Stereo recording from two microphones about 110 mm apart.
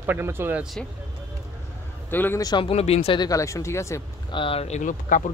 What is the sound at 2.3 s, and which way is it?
Speech, 35° left (ahead or behind).